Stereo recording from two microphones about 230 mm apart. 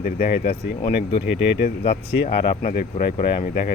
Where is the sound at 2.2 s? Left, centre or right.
Left.